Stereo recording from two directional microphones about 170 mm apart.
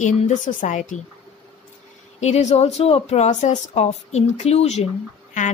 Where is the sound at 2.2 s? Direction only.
40° left (ahead or behind).